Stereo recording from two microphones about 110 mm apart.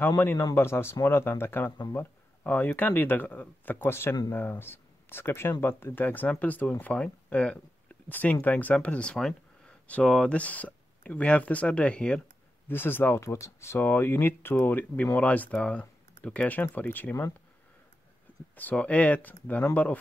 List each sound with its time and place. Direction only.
0.6 s speech: 20° left (ahead or behind)
18.6 s speech: 15° left (ahead or behind)